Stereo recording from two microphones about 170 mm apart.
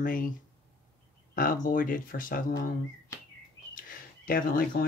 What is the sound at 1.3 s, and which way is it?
Speech, 55° left (ahead or behind).